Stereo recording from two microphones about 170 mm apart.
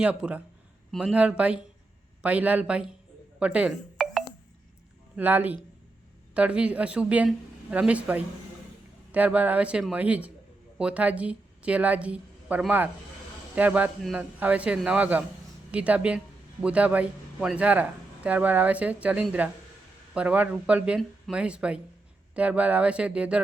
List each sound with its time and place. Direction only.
0.0 s speech: 5° right (ahead or behind)
3.4 s music: 5° right (ahead or behind)
5.1 s a woman's voice: 10° right (ahead or behind)